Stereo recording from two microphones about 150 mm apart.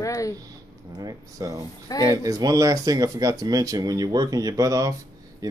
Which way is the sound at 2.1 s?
25° right (ahead or behind).